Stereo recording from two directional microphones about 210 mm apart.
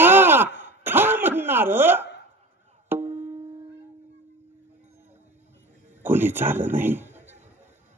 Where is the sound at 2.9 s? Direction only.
10° right (ahead or behind).